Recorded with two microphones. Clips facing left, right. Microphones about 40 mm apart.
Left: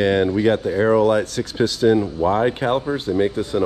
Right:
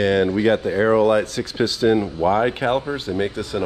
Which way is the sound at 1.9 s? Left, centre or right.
Right.